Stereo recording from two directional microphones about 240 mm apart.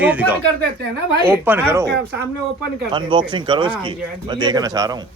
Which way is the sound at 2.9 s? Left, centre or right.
Centre.